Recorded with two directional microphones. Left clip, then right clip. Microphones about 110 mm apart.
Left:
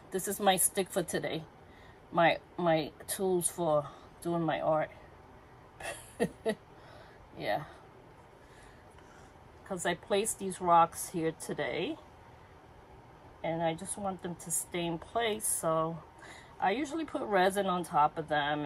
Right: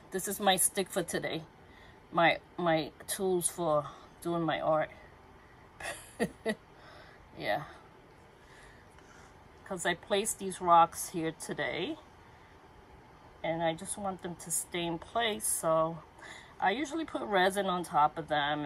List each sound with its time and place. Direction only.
0.1 s a woman's voice: 10° left (ahead or behind)
5.8 s a sound: centre (ahead or behind)
7.3 s speech: 5° left (ahead or behind)
9.7 s speech: 5° left (ahead or behind)
13.4 s speech: centre (ahead or behind)